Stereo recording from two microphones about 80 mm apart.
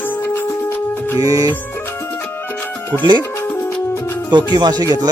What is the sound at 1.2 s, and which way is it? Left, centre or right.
Speech, right.